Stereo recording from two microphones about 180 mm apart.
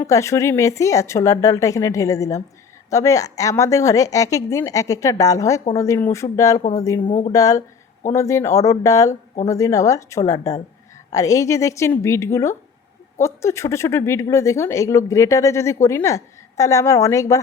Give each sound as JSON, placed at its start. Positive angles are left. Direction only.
{"t": 0.0, "sound": "speech", "side_deg": 15}
{"t": 7.1, "sound": "speech", "side_deg": 40}
{"t": 7.3, "sound": "speech", "side_deg": 20}